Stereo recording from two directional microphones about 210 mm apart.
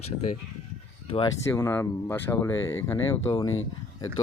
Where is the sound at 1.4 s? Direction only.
10° left (ahead or behind).